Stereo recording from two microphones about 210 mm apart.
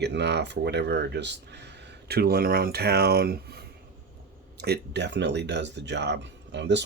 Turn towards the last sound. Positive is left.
turn(degrees=-55)  # may be behind; listen again after turning